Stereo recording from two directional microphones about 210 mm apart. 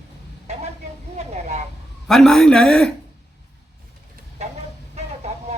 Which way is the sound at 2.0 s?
Centre (ahead or behind).